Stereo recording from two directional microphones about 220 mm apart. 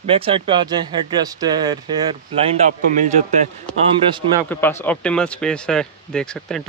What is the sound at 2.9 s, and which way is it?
Speech, 35° right (ahead or behind).